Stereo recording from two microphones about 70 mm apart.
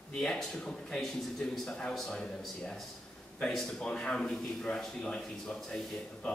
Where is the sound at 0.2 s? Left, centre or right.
Centre.